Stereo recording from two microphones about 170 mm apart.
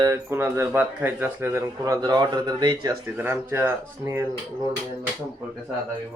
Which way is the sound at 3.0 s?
15° right (ahead or behind).